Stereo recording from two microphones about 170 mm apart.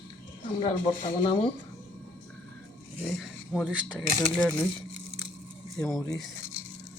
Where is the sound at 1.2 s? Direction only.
30° left (ahead or behind).